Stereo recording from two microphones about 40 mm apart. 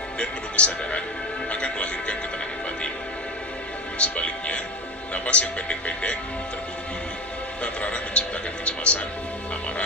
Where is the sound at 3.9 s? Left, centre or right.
Left.